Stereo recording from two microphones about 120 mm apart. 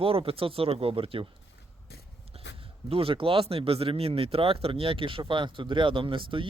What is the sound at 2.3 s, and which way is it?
Speech, 50° right (ahead or behind).